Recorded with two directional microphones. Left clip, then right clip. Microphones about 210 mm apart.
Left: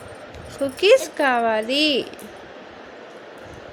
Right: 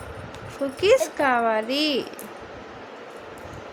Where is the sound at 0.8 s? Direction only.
10° left (ahead or behind).